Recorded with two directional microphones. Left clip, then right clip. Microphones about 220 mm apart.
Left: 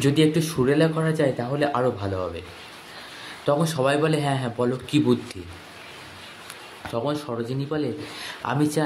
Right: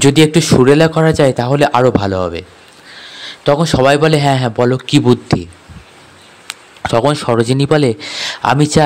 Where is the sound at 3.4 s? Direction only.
40° right (ahead or behind).